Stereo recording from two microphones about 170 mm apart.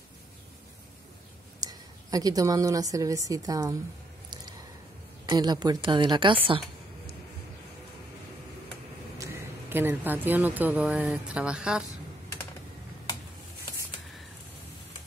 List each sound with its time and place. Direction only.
1.6 s a woman's voice: 20° right (ahead or behind)
5.2 s a woman's voice: 25° right (ahead or behind)
9.2 s speech: 15° right (ahead or behind)